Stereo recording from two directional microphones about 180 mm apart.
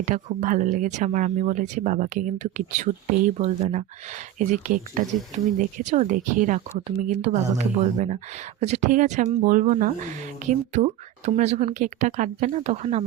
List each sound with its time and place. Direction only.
0.0 s speech: 45° right (ahead or behind)